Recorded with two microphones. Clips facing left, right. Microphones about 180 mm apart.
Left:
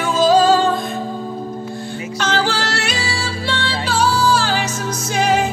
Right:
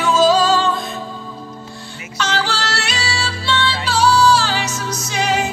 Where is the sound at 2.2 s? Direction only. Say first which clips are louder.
Left 2 dB; 50° left (ahead or behind).